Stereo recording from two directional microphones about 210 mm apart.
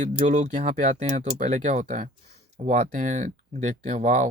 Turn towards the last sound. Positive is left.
turn(degrees=-35)  # may be behind; listen again after turning